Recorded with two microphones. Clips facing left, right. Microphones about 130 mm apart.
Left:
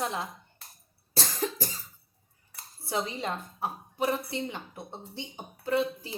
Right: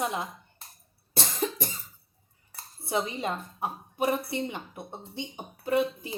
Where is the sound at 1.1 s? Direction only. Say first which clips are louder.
Right 1 dB; 20° right (ahead or behind).